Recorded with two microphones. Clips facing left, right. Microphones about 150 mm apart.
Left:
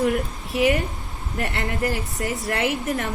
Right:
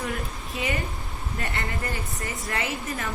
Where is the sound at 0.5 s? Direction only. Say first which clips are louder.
Left 10 dB; 80° left.